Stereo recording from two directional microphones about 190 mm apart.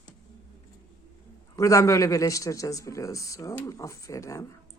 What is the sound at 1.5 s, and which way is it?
A man's voice, 15° left (ahead or behind).